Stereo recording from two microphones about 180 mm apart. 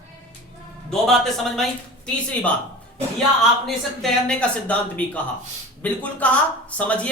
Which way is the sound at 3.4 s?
Centre (ahead or behind).